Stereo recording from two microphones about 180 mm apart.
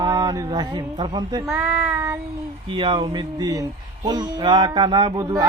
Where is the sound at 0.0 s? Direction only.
20° right (ahead or behind).